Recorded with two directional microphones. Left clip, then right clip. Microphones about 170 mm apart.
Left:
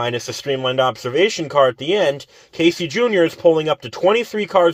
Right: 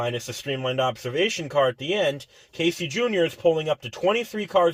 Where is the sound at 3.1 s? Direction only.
45° left (ahead or behind).